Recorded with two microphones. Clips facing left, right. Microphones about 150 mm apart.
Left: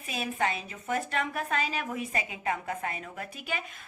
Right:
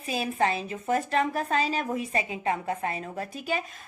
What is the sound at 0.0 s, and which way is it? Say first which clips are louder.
A woman's voice: right 4 dB; 35° right (ahead or behind).